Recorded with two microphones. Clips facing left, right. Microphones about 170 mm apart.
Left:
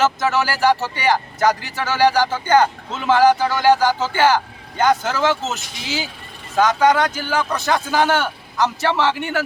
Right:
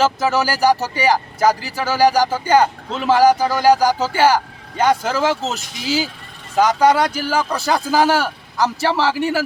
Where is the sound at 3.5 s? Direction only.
40° right (ahead or behind).